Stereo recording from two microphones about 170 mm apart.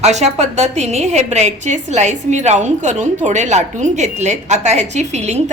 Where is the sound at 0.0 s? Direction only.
40° right (ahead or behind).